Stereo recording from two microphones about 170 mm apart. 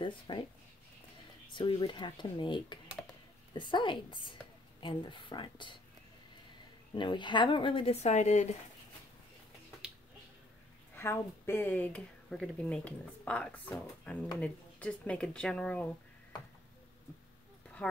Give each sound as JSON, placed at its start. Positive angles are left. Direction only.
{"t": 0.0, "sound": "speech", "side_deg": 30}
{"t": 1.5, "sound": "a woman's voice", "side_deg": 30}
{"t": 6.9, "sound": "a woman's voice", "side_deg": 25}
{"t": 11.0, "sound": "speech", "side_deg": 15}